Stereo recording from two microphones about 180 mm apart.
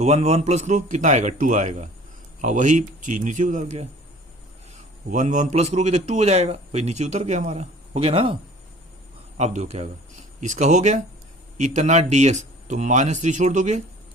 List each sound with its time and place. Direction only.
0.0 s a man's voice: 35° right (ahead or behind)
5.1 s a man's voice: 40° right (ahead or behind)
9.4 s a man's voice: 40° right (ahead or behind)